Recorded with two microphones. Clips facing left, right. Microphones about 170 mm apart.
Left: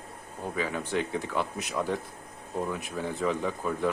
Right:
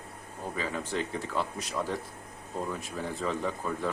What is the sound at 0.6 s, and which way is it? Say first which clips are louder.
Speech: left 2 dB; centre (ahead or behind).